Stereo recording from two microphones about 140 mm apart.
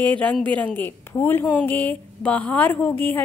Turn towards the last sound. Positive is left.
turn(degrees=15)  # may be behind; listen again after turning